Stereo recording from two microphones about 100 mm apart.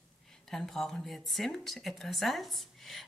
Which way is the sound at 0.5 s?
5° left (ahead or behind).